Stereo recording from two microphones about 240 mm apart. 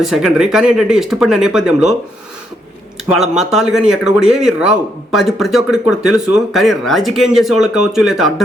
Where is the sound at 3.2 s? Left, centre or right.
Centre.